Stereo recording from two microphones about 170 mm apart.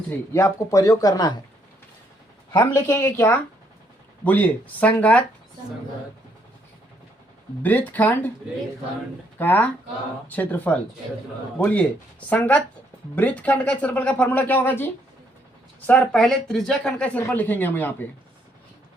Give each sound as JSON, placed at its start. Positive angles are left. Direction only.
{"t": 0.1, "sound": "speech", "side_deg": 20}
{"t": 2.5, "sound": "speech", "side_deg": 20}
{"t": 7.6, "sound": "speech", "side_deg": 10}
{"t": 9.4, "sound": "speech", "side_deg": 10}
{"t": 15.9, "sound": "speech", "side_deg": 5}